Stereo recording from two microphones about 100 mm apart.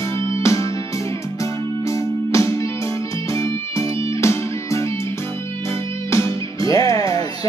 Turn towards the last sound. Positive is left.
turn(degrees=35)  # may be behind; listen again after turning